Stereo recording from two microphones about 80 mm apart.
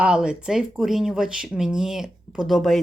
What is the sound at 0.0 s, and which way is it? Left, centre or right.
Speech, centre.